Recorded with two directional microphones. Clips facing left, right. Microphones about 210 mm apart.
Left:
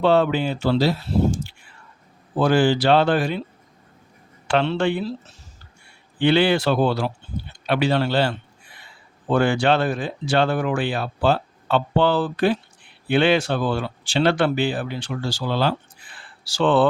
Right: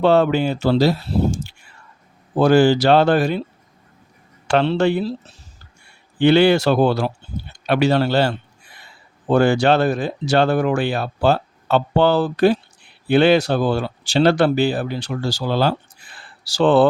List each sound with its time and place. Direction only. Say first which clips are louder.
0.0 s speech: right 3 dB; 45° right (ahead or behind)
4.4 s speech: right 4 dB; 40° right (ahead or behind)